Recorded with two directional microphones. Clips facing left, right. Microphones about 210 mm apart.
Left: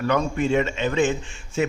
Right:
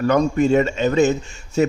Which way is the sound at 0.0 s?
45° right (ahead or behind).